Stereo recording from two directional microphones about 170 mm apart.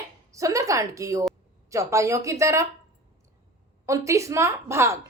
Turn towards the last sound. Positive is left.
turn(degrees=-15)  # may be behind; listen again after turning